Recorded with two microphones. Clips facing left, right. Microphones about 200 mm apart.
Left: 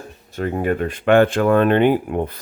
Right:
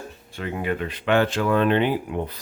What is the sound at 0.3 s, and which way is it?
Speech, 45° left (ahead or behind).